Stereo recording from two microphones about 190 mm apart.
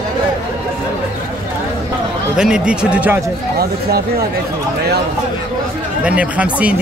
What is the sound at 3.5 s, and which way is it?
Speech, 55° right (ahead or behind).